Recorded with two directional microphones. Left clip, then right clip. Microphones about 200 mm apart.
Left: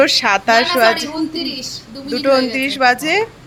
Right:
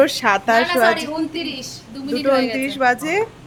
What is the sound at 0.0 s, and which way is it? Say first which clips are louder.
A woman's voice: left 3 dB; 10° right (ahead or behind).